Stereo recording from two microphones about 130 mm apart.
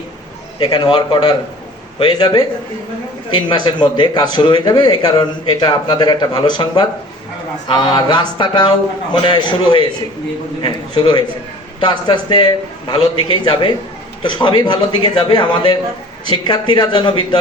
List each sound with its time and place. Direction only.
0.6 s a man's voice: 35° left (ahead or behind)
7.7 s a man's voice: 35° left (ahead or behind)